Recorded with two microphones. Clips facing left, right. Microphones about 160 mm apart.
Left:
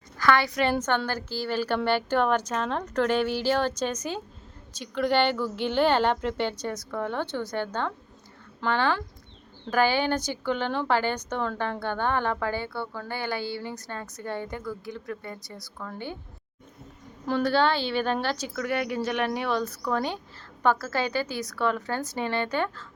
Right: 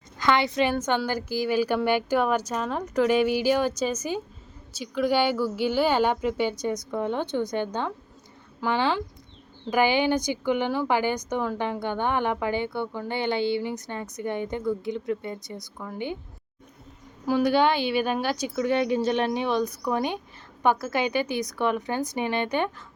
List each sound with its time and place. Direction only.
0.2 s a woman's voice: 20° right (ahead or behind)
17.2 s speech: 10° right (ahead or behind)